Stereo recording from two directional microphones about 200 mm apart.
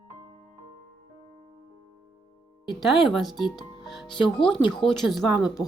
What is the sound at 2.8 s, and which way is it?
Speech, centre (ahead or behind).